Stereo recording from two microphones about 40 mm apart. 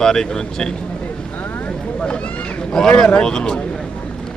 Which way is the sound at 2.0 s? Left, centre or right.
Left.